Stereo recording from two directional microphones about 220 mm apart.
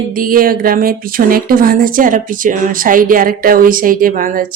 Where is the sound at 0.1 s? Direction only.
40° right (ahead or behind).